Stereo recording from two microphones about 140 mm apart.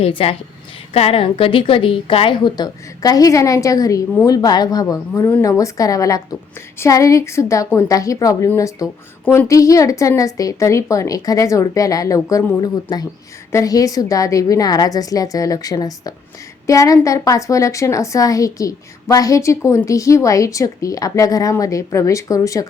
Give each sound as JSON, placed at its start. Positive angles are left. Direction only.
{"t": 0.0, "sound": "a woman's voice", "side_deg": 40}